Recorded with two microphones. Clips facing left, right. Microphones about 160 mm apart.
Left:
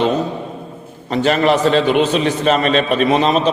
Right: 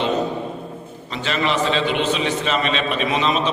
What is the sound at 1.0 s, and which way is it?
A man's voice, 50° left (ahead or behind).